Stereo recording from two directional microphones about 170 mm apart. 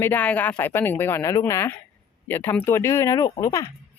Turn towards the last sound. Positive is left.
turn(degrees=20)  # may be behind; listen again after turning